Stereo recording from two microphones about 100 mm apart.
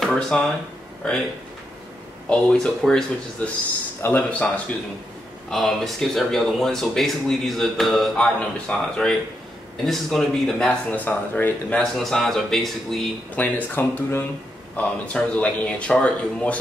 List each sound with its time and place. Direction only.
0.0 s a sound: 5° left (ahead or behind)
2.2 s speech: 5° left (ahead or behind)
3.4 s speech: 15° left (ahead or behind)
5.5 s speech: centre (ahead or behind)
10.9 s speech: 20° left (ahead or behind)
11.8 s speech: 5° left (ahead or behind)
13.4 s speech: 15° left (ahead or behind)